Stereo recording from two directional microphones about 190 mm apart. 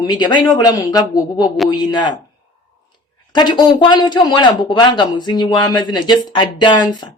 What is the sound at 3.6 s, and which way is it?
Speech, 25° left (ahead or behind).